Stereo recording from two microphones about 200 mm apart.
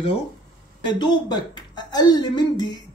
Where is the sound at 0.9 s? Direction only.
20° left (ahead or behind).